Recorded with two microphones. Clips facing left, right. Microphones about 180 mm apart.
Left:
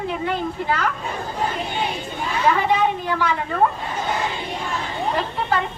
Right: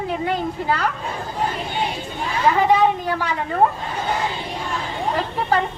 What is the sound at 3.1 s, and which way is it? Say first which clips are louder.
Speech: left 1 dB; 40° right (ahead or behind).